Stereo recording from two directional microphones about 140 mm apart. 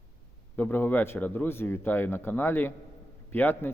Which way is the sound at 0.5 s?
15° left (ahead or behind).